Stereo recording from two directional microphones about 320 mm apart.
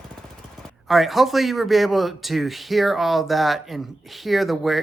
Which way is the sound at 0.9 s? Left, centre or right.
Centre.